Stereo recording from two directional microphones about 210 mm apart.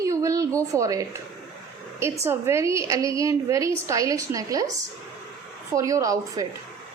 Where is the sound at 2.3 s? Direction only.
10° right (ahead or behind).